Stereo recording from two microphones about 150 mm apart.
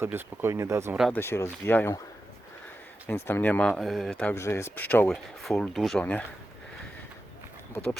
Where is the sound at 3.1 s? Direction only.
15° left (ahead or behind).